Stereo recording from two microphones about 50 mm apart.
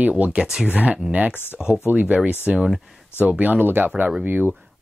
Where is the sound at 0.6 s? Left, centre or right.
Right.